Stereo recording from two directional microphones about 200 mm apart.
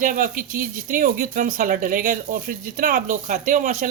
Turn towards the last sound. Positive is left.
turn(degrees=-40)  # may be behind; listen again after turning